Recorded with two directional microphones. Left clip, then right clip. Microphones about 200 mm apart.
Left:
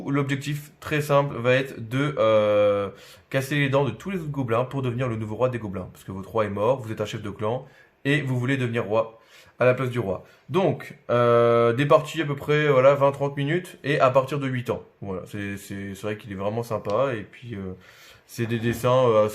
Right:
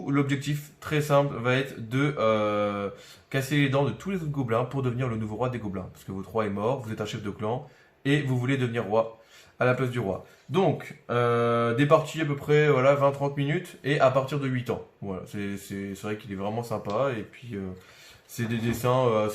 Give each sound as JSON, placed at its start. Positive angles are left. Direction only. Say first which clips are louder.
{"t": 0.0, "sound": "speech", "louder": "left 1 dB", "side_deg": 55}